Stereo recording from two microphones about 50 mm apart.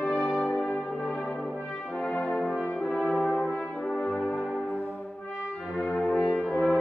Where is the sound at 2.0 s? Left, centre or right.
Centre.